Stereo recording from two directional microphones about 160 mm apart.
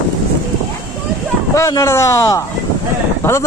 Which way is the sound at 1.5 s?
20° left (ahead or behind).